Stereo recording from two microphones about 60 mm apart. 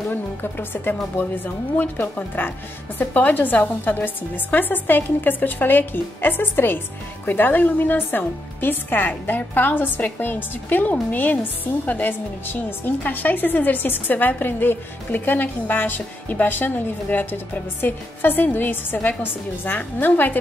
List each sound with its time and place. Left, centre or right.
0.1 s a woman's voice: left